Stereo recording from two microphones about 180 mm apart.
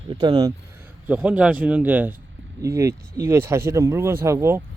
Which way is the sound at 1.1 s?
5° right (ahead or behind).